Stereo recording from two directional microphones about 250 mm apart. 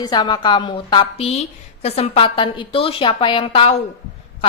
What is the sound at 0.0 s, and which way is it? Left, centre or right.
A woman's voice, centre.